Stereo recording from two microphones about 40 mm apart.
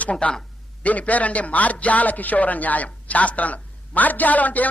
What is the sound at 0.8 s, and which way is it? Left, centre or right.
Speech, left.